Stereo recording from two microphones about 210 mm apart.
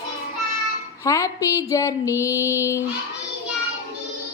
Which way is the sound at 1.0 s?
15° left (ahead or behind).